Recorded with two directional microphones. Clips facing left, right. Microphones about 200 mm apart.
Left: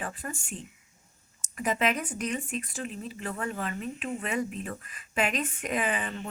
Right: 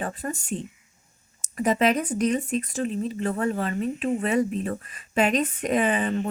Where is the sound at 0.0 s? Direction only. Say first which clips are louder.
Right 6 dB; 40° right (ahead or behind).